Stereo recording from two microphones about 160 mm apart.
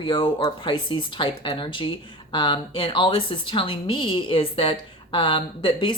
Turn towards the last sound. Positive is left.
turn(degrees=30)  # may be behind; listen again after turning